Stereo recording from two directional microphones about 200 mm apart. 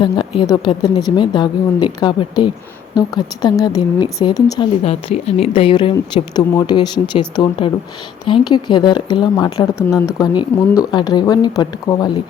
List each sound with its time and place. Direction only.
0.0 s a woman's voice: 25° left (ahead or behind)
4.8 s a woman's voice: 30° left (ahead or behind)